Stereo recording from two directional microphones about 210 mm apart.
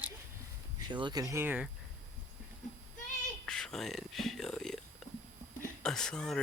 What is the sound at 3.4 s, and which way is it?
Speech, centre (ahead or behind).